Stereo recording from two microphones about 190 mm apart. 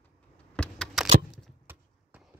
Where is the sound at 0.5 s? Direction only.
5° left (ahead or behind).